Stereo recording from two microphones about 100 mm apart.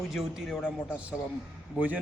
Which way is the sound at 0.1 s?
Centre (ahead or behind).